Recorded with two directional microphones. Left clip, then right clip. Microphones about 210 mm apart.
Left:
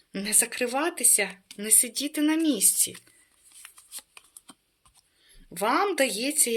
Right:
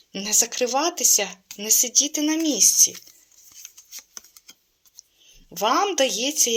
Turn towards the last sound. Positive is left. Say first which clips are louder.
# right 5 dB
turn(degrees=20)  # may be behind; listen again after turning